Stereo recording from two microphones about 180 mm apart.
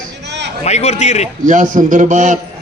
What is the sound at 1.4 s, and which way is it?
Speech, 45° right (ahead or behind).